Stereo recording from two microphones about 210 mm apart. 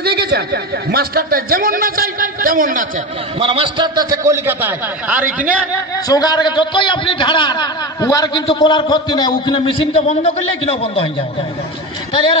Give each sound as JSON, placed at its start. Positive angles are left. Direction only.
{"t": 0.0, "sound": "speech", "side_deg": -50}
{"t": 3.3, "sound": "a man's voice", "side_deg": -25}
{"t": 6.0, "sound": "a man's voice", "side_deg": 20}
{"t": 12.1, "sound": "speech", "side_deg": 25}